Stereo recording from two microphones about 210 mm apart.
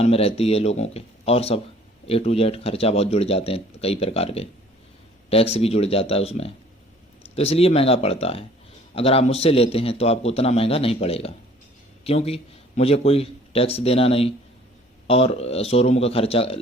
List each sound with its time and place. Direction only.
0.0 s speech: 30° left (ahead or behind)